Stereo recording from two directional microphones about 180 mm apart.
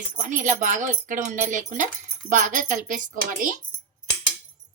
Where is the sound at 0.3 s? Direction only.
45° right (ahead or behind).